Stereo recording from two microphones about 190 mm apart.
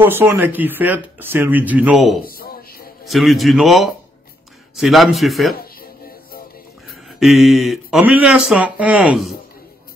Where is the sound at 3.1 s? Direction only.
Centre (ahead or behind).